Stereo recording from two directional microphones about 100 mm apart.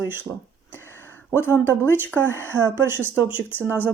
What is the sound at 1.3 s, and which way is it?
Speech, 20° left (ahead or behind).